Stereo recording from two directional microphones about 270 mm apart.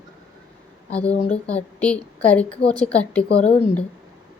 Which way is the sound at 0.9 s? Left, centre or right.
Centre.